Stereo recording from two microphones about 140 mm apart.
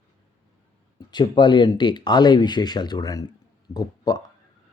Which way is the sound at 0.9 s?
30° left (ahead or behind).